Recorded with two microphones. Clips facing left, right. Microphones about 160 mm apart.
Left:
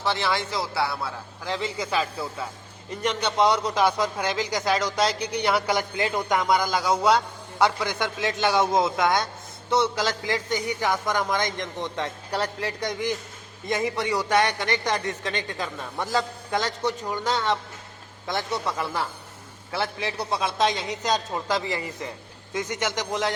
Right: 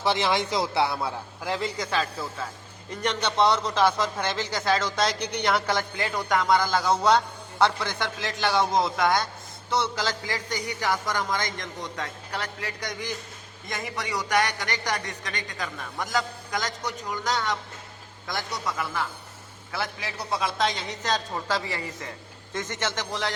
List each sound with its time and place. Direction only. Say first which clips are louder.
0.0 s a man's voice: right 2 dB; 15° right (ahead or behind)
1.5 s a man's voice: even; centre (ahead or behind)
1.7 s a man's voice: left 1 dB; 10° left (ahead or behind)